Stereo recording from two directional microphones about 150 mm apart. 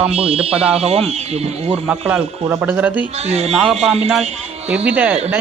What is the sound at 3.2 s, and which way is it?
Speech, 45° right (ahead or behind).